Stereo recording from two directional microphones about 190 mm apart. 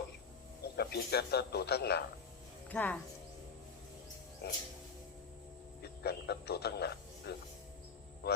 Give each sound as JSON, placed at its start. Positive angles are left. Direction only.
{"t": 0.6, "sound": "speech", "side_deg": 55}
{"t": 2.6, "sound": "speech", "side_deg": 10}
{"t": 4.4, "sound": "speech", "side_deg": 60}
{"t": 5.8, "sound": "speech", "side_deg": 55}